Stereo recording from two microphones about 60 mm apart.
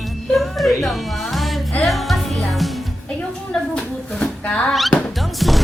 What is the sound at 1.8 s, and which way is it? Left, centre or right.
Music, centre.